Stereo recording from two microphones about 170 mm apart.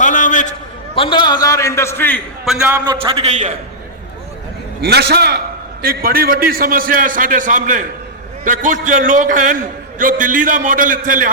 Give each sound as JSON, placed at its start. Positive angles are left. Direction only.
{"t": 0.0, "sound": "a sound", "side_deg": 50}
{"t": 0.9, "sound": "a man's voice", "side_deg": 30}
{"t": 2.4, "sound": "a man's voice", "side_deg": -5}
{"t": 2.8, "sound": "a man's voice", "side_deg": -30}
{"t": 4.8, "sound": "a man's voice", "side_deg": -75}